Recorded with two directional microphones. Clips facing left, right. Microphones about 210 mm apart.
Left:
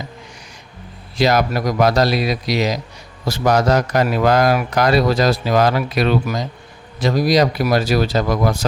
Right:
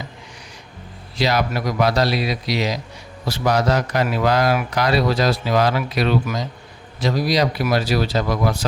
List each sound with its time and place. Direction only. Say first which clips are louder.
1.2 s a man's voice: left 4 dB; 45° left (ahead or behind)